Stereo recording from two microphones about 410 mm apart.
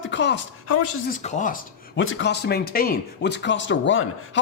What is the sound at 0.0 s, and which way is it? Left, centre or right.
Speech, left.